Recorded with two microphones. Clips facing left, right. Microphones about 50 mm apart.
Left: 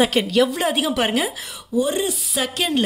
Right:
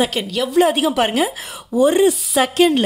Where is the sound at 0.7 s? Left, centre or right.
Centre.